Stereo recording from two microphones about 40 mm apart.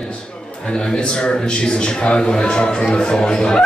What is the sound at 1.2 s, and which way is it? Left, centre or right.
A man's voice, left.